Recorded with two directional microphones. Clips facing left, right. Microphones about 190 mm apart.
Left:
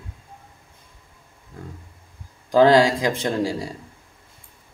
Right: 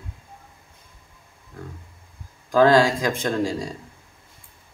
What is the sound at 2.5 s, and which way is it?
Speech, 20° left (ahead or behind).